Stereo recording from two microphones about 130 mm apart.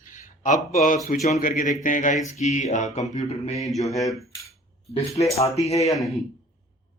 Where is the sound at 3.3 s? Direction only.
55° left (ahead or behind).